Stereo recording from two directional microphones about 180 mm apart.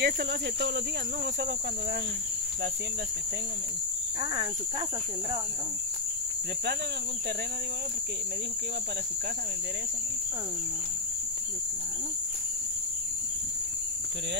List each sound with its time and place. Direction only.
0.0 s speech: 65° right (ahead or behind)